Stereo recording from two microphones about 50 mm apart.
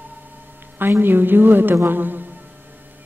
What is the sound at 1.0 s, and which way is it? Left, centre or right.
A woman's voice, right.